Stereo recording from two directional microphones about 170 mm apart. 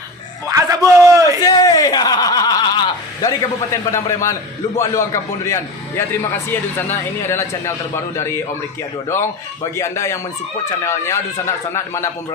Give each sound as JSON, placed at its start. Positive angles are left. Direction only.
{"t": 0.4, "sound": "a sound", "side_deg": -20}
{"t": 1.4, "sound": "a man's voice", "side_deg": 20}
{"t": 9.7, "sound": "a man's voice", "side_deg": 15}